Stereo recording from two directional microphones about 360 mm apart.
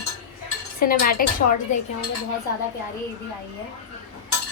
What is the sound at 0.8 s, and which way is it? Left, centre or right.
Dishes, left.